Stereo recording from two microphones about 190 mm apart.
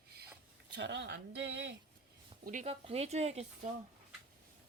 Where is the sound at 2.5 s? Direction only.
35° right (ahead or behind).